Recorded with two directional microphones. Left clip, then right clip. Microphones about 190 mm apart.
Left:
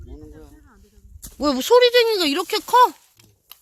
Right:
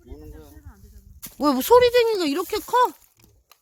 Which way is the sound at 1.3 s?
20° right (ahead or behind).